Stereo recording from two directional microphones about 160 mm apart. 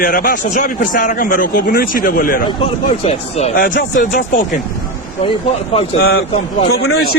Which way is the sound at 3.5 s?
65° left (ahead or behind).